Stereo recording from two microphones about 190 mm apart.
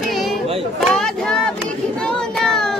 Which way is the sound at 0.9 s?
Centre (ahead or behind).